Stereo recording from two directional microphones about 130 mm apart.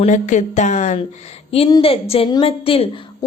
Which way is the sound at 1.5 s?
45° left (ahead or behind).